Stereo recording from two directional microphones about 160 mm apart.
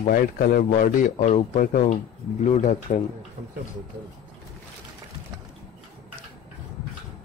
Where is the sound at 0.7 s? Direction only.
50° left (ahead or behind).